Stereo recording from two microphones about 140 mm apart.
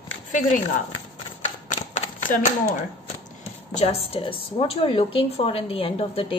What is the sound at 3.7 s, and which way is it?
A woman's voice, 45° left (ahead or behind).